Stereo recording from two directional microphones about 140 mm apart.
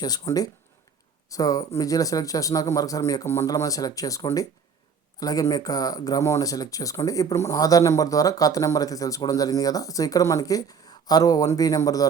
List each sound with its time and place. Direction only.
0.0 s speech: 30° left (ahead or behind)